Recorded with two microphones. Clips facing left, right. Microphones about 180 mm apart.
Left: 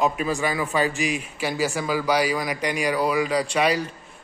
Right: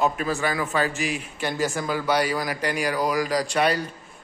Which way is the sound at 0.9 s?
40° right (ahead or behind).